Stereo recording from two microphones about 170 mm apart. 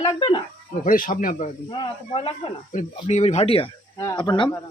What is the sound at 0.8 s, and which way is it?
Speech, 55° left (ahead or behind).